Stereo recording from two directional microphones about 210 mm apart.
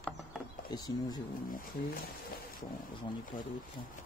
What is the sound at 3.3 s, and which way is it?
Speech, 40° left (ahead or behind).